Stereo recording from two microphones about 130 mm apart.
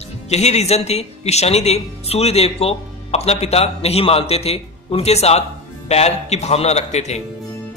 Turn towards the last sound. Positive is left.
turn(degrees=60)  # may be behind; listen again after turning